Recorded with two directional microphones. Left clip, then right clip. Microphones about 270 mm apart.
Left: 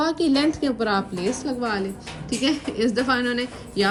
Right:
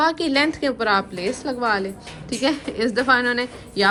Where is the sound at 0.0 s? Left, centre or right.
Centre.